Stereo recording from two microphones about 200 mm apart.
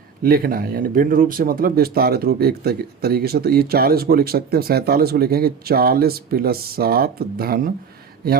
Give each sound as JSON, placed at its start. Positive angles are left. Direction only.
{"t": 0.2, "sound": "speech", "side_deg": -50}